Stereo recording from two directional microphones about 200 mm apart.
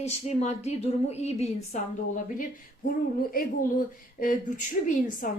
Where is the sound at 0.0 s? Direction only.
35° left (ahead or behind).